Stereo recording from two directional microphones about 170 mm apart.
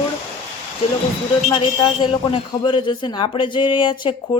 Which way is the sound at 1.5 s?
30° left (ahead or behind).